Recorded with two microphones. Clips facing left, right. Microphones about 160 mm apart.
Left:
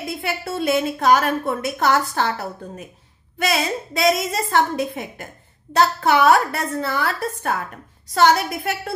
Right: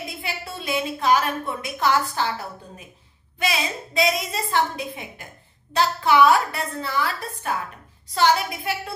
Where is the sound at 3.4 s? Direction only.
45° left (ahead or behind).